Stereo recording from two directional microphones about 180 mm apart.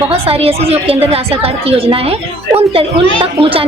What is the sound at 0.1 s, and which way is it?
A woman's voice, 35° right (ahead or behind).